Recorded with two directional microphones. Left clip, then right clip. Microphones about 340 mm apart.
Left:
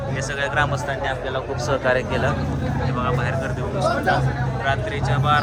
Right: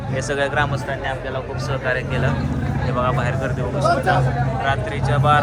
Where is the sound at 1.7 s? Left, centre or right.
Centre.